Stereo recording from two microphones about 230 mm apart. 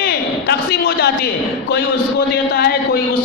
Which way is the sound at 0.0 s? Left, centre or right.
Left.